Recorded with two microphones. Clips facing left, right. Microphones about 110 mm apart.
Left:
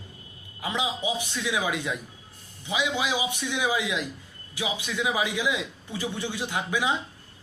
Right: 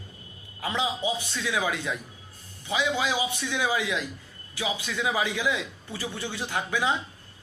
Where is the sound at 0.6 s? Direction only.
15° left (ahead or behind).